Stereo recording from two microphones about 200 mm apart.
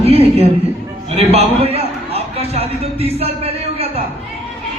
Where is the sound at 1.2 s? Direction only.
30° right (ahead or behind).